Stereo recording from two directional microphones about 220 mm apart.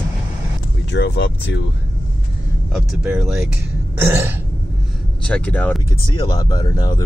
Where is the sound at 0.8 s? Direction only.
50° left (ahead or behind).